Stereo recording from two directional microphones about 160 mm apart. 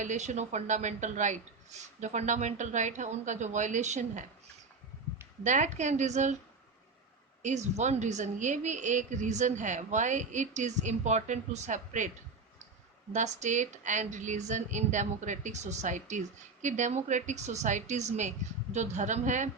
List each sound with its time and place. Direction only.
0.0 s speech: 50° right (ahead or behind)
5.4 s speech: 50° right (ahead or behind)
7.4 s speech: 45° right (ahead or behind)
13.1 s speech: 50° right (ahead or behind)